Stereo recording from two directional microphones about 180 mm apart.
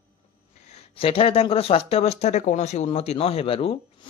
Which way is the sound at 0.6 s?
35° left (ahead or behind).